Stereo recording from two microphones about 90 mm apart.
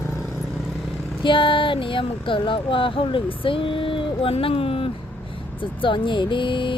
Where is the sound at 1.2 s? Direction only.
65° left (ahead or behind); by 4.9 s 90° left.